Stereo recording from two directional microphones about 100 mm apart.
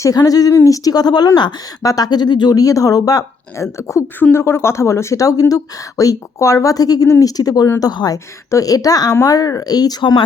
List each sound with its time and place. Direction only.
0.0 s a woman's voice: 35° left (ahead or behind)